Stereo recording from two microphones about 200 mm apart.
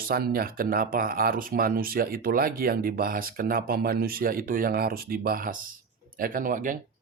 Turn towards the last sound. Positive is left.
turn(degrees=-40)  # may be behind; listen again after turning